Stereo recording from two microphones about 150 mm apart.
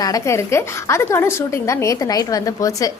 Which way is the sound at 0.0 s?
20° left (ahead or behind).